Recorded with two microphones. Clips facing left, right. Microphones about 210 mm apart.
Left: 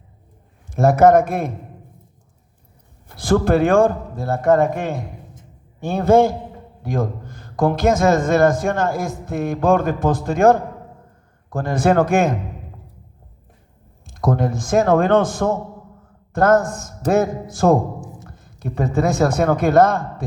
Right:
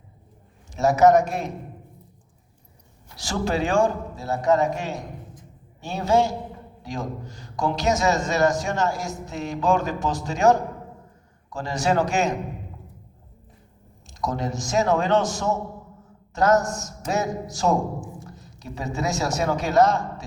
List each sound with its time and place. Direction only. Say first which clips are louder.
0.7 s a man's voice: left 4 dB; 55° left (ahead or behind)
3.1 s a man's voice: left 10 dB; 55° left (ahead or behind)
14.1 s a man's voice: left 7 dB; 55° left (ahead or behind)